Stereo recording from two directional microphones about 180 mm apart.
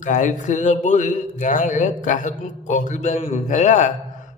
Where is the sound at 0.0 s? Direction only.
45° left (ahead or behind).